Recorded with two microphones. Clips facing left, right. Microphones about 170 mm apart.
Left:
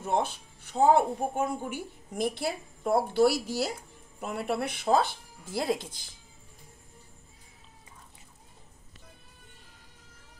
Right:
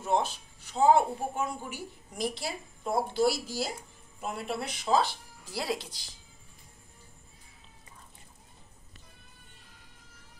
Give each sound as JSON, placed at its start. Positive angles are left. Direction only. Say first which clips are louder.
{"t": 0.0, "sound": "a woman's voice", "louder": "even", "side_deg": 55}